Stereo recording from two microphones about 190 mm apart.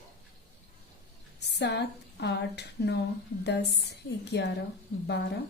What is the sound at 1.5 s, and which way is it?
Speech, 65° left (ahead or behind).